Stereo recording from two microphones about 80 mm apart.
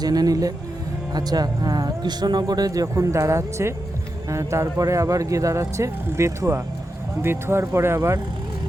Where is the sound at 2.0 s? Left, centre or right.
Right.